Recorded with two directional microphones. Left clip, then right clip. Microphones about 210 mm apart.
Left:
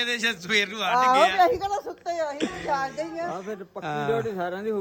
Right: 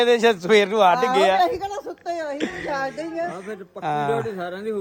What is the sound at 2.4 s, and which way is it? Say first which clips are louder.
Speech: right 2 dB; 15° left (ahead or behind).